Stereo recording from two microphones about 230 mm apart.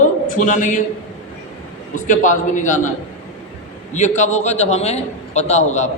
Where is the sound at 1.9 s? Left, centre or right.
Left.